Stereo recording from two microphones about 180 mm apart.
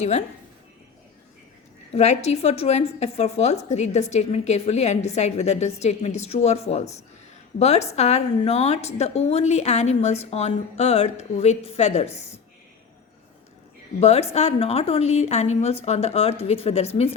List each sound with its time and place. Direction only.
1.9 s a woman's voice: 35° left (ahead or behind)
14.0 s a woman's voice: 35° left (ahead or behind)